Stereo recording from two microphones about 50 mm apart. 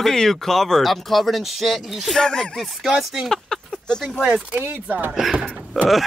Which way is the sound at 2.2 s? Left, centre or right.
Centre.